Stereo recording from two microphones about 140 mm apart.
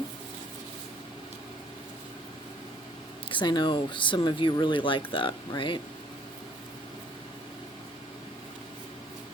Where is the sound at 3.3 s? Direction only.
30° left (ahead or behind).